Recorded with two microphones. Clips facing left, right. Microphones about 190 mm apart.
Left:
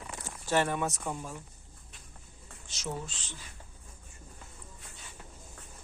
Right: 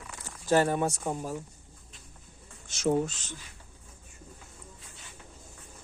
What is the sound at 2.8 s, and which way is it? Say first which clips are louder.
Speech: right 12 dB; 50° right (ahead or behind).